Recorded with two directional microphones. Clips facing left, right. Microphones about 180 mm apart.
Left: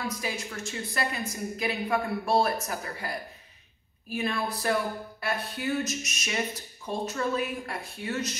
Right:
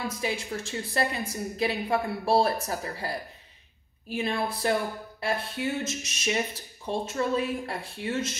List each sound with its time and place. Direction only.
0.0 s a woman's voice: 30° right (ahead or behind)